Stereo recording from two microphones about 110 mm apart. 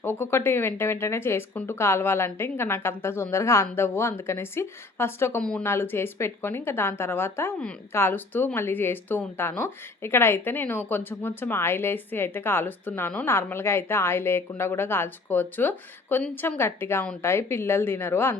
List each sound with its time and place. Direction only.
0.0 s speech: 20° left (ahead or behind)
5.4 s speech: 10° left (ahead or behind)
5.6 s speech: 20° left (ahead or behind)